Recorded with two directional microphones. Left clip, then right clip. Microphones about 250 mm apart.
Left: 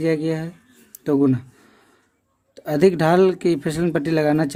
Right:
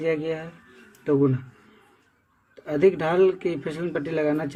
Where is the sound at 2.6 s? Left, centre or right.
Left.